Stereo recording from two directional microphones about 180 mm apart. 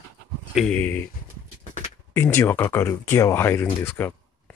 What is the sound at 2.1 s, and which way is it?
Speech, 10° left (ahead or behind).